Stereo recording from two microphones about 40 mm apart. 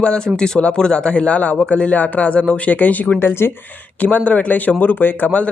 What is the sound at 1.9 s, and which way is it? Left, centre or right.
Speech, left.